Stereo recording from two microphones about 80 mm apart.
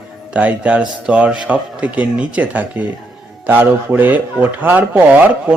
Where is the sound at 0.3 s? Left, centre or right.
Centre.